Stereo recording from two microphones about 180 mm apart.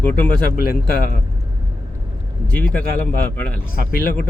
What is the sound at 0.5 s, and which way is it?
Speech, 55° left (ahead or behind).